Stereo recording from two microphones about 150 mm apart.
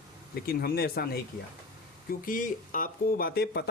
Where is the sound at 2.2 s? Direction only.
65° left (ahead or behind); by 3.6 s 90° left.